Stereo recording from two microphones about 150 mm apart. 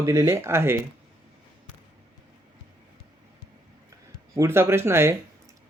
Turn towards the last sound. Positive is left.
turn(degrees=-15)  # may be behind; listen again after turning